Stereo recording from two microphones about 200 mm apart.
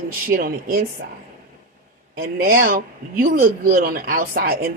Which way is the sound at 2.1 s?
50° right (ahead or behind).